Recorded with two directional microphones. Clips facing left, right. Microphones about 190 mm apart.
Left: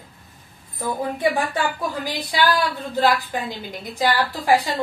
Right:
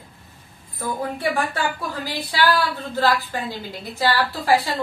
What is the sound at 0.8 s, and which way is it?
A woman's voice, 15° left (ahead or behind).